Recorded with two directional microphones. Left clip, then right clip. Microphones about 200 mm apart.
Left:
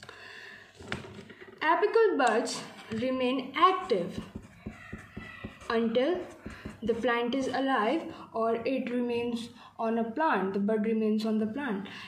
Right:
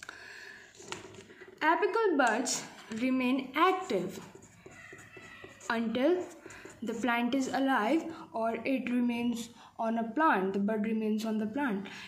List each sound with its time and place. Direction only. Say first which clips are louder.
1.6 s a woman's voice: left 3 dB; 40° right (ahead or behind)
5.7 s a woman's voice: left 2 dB; 50° right (ahead or behind)